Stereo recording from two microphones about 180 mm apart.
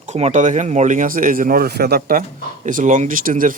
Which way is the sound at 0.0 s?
40° right (ahead or behind).